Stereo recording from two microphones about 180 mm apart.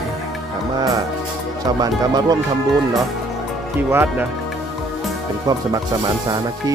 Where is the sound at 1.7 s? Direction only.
20° right (ahead or behind).